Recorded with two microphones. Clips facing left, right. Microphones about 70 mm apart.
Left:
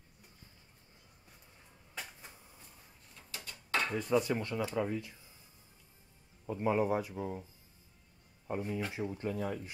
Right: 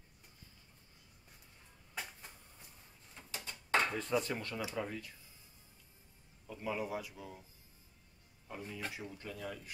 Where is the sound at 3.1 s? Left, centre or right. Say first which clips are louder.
Right 1 dB; right.